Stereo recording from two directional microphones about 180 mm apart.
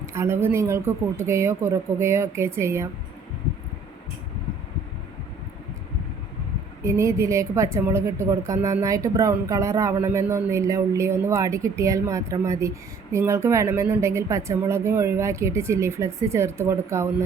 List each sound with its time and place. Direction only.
0.0 s a woman's voice: 15° right (ahead or behind)
6.8 s a woman's voice: 15° right (ahead or behind)